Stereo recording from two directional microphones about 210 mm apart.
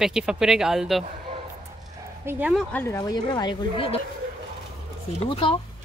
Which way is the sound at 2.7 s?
15° left (ahead or behind).